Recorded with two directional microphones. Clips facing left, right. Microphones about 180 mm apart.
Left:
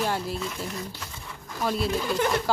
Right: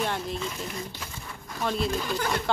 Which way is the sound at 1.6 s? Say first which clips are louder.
Left 1 dB; 5° left (ahead or behind).